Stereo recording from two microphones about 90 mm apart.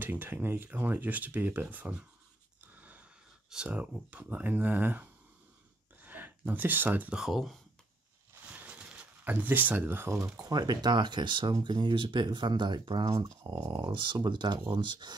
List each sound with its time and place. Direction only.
0.0 s speech: 20° right (ahead or behind)
2.6 s a sound: 15° right (ahead or behind)
3.4 s speech: 10° right (ahead or behind)
7.2 s speech: 5° right (ahead or behind)
8.5 s a sound: 15° right (ahead or behind)
10.4 s speech: 50° right (ahead or behind)
13.1 s speech: 35° right (ahead or behind)
13.7 s speech: 60° right (ahead or behind)